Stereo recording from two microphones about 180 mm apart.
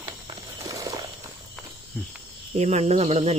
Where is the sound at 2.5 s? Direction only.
40° right (ahead or behind).